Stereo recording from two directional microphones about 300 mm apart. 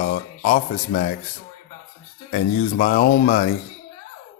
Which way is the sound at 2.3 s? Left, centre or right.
Left.